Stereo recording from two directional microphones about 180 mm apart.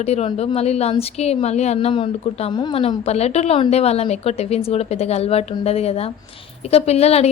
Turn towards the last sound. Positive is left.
turn(degrees=35)  # may be behind; listen again after turning